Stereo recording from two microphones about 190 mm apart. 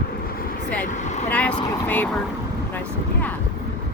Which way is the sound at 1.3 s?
5° left (ahead or behind).